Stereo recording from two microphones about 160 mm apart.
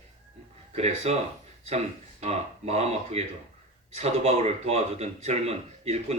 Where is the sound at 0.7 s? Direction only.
40° right (ahead or behind).